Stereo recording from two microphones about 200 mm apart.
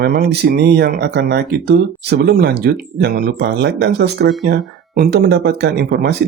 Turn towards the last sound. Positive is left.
turn(degrees=-55)  # may be behind; listen again after turning